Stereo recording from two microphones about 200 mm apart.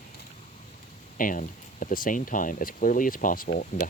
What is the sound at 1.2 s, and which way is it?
Speech, 40° left (ahead or behind).